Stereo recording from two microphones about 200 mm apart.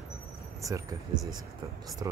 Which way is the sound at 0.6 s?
15° right (ahead or behind).